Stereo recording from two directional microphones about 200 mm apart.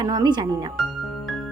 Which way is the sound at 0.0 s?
20° right (ahead or behind).